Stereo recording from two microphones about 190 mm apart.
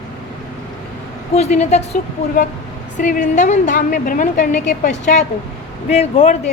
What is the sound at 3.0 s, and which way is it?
A woman's voice, 45° left (ahead or behind).